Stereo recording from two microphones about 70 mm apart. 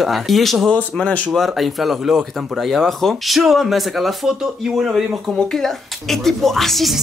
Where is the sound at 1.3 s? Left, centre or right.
Centre.